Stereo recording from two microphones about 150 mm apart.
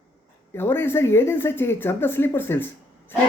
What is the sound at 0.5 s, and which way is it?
Speech, 15° left (ahead or behind).